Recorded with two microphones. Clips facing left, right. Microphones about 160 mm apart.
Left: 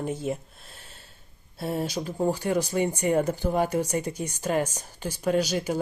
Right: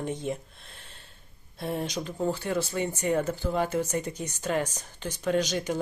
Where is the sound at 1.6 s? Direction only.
5° left (ahead or behind).